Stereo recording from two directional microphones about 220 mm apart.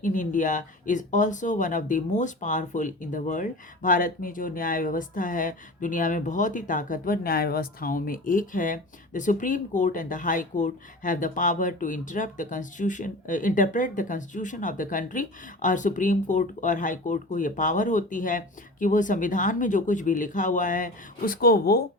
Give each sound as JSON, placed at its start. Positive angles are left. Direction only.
{"t": 0.0, "sound": "speech", "side_deg": 35}